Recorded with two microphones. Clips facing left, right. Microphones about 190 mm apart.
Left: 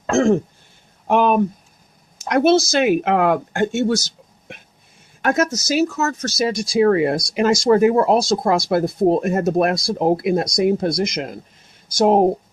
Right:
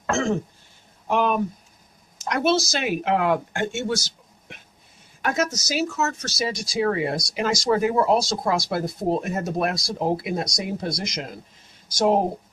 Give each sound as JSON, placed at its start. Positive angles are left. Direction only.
{"t": 1.0, "sound": "speech", "side_deg": 55}
{"t": 5.2, "sound": "speech", "side_deg": 55}
{"t": 6.0, "sound": "speech", "side_deg": 40}
{"t": 6.4, "sound": "speech", "side_deg": 55}